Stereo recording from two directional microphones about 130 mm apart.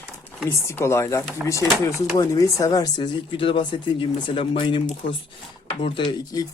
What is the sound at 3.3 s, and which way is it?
Speech, 40° left (ahead or behind).